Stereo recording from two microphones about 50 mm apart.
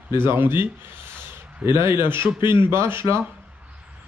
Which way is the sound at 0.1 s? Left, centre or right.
Right.